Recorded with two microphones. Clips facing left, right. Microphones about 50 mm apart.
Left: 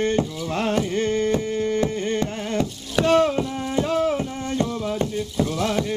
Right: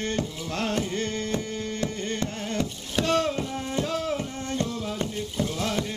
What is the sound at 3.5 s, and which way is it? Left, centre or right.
Music, centre.